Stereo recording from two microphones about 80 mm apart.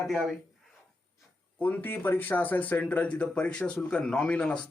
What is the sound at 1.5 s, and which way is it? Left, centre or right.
A man's voice, left.